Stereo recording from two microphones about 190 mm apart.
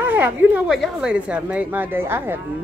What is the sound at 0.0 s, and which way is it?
Speech, 10° right (ahead or behind).